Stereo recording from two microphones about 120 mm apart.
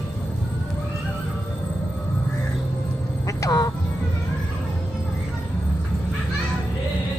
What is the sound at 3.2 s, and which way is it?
Music, 30° left (ahead or behind).